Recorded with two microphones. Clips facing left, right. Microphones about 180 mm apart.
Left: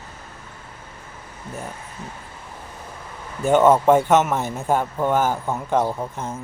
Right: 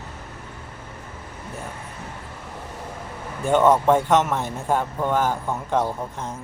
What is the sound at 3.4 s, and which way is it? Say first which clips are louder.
A man's voice: left 2 dB; 5° left (ahead or behind).